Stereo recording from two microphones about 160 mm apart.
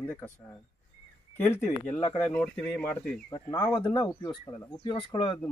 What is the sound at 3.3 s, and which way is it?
A man's voice, 30° left (ahead or behind).